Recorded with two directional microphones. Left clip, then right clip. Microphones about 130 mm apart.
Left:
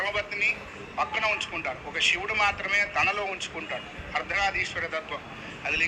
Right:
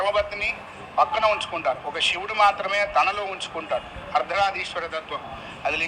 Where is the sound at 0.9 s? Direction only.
35° right (ahead or behind).